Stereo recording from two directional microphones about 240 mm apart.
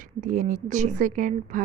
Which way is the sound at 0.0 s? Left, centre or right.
Right.